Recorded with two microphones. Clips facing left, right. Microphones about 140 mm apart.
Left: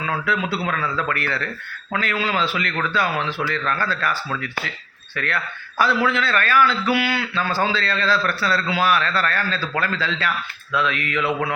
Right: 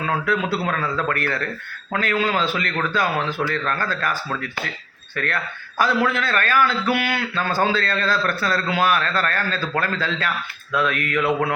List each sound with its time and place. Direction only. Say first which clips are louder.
0.3 s a man's voice: even; 45° right (ahead or behind)